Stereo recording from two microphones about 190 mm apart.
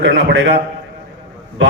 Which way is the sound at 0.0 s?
70° right (ahead or behind).